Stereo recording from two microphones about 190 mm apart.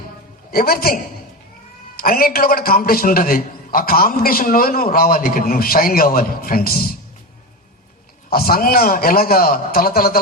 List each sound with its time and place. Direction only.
0.5 s a man's voice: 50° left (ahead or behind)
2.0 s a man's voice: 50° left (ahead or behind)
8.3 s a man's voice: 50° left (ahead or behind)